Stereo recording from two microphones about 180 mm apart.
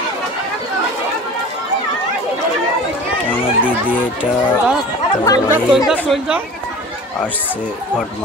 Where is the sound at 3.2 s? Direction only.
10° left (ahead or behind).